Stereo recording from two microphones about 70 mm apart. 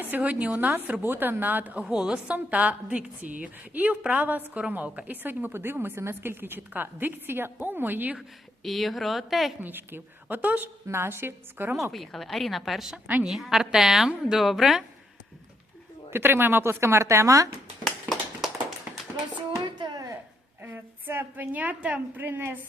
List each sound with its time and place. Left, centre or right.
0.0 s a woman's voice: right
8.6 s a woman's voice: centre
9.6 s a woman's voice: right
10.8 s speech: right
11.8 s a woman's voice: centre
16.0 s speech: right
17.8 s a sound: centre
18.9 s a sound: right
20.6 s a woman's voice: right